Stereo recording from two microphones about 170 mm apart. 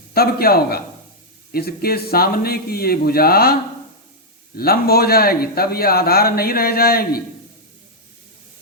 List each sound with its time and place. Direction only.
0.1 s speech: 65° left (ahead or behind)